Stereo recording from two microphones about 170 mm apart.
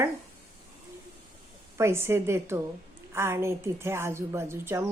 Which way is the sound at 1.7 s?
15° right (ahead or behind).